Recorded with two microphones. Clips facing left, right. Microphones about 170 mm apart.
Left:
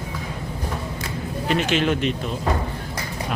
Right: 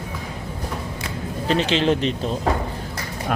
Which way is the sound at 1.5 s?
30° right (ahead or behind).